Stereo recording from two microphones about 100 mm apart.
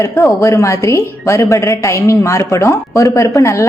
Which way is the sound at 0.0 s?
30° left (ahead or behind).